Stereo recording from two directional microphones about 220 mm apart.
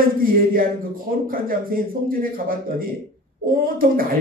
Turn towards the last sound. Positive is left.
turn(degrees=-40)  # may be behind; listen again after turning